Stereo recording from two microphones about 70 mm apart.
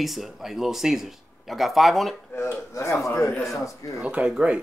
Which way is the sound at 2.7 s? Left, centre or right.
Left.